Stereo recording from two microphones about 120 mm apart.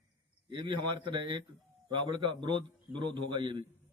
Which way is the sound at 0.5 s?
40° right (ahead or behind).